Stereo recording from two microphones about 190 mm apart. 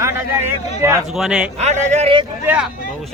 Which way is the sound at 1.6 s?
35° right (ahead or behind).